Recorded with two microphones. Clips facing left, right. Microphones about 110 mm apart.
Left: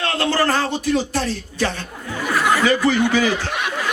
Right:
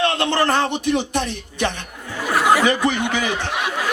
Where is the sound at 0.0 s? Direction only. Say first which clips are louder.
Right 1 dB; 20° right (ahead or behind).